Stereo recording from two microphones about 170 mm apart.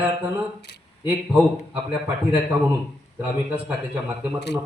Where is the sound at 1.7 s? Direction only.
10° right (ahead or behind).